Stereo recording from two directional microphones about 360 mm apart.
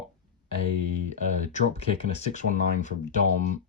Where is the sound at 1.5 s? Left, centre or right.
Centre.